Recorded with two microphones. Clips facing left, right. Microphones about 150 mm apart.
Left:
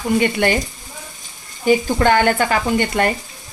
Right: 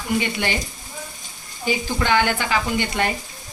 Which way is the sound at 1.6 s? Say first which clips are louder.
Left 8 dB; 50° left (ahead or behind).